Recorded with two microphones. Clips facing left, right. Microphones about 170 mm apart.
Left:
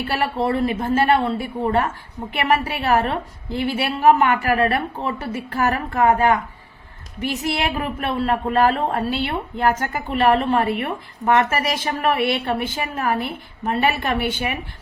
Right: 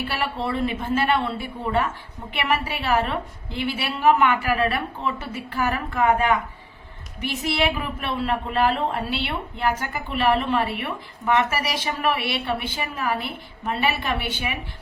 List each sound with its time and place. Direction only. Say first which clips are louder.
0.1 s speech: left 9 dB; 45° left (ahead or behind)